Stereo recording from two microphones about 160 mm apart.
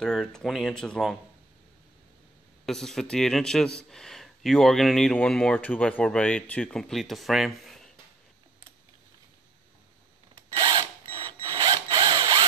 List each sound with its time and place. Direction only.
0.0 s speech: 5° left (ahead or behind)
2.6 s speech: centre (ahead or behind)
10.3 s drill: 30° right (ahead or behind)